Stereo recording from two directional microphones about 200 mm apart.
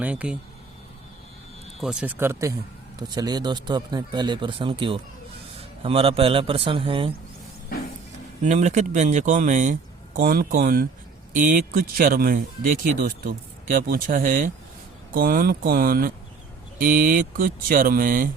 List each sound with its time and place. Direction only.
0.0 s speech: 5° right (ahead or behind)
1.8 s speech: 5° right (ahead or behind); by 7.1 s 25° right (ahead or behind)
8.4 s speech: 35° right (ahead or behind)